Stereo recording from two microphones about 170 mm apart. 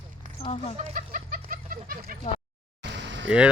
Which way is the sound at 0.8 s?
55° right (ahead or behind).